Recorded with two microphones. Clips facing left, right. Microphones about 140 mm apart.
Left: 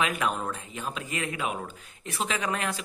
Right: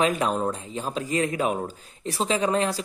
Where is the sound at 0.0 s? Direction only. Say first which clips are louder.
Right 5 dB; 35° right (ahead or behind).